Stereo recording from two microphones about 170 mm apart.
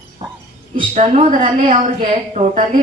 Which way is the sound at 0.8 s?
35° right (ahead or behind).